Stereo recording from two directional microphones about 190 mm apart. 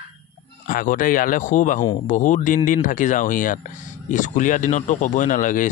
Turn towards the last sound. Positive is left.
turn(degrees=45)  # may be behind; listen again after turning